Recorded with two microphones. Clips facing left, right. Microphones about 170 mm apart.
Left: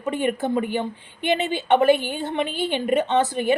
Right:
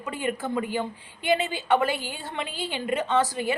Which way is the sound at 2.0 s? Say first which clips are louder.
Left 8 dB; 60° left (ahead or behind).